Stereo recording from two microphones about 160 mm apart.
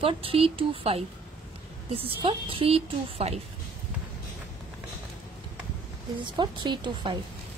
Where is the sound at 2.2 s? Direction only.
35° right (ahead or behind).